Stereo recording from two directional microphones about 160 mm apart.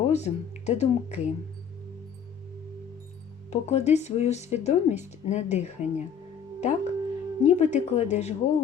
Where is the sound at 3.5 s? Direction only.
45° left (ahead or behind).